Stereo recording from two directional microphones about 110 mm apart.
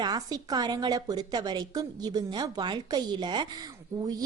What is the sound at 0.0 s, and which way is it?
A woman's voice, 40° right (ahead or behind).